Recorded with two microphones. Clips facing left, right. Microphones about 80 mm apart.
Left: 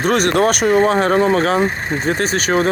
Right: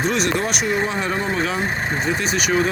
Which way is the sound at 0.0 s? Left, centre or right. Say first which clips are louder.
Left 6 dB; left.